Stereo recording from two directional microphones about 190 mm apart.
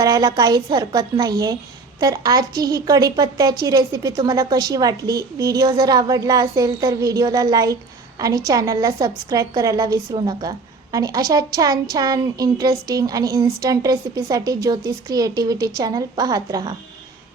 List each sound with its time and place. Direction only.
0.0 s a woman's voice: 20° right (ahead or behind)